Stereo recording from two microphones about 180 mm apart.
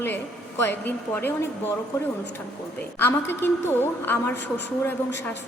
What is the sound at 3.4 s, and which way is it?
A woman's voice, 10° left (ahead or behind).